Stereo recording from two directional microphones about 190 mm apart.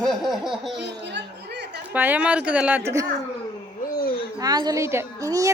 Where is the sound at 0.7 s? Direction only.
65° right (ahead or behind).